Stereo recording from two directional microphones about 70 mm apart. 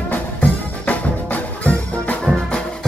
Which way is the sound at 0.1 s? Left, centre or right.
Left.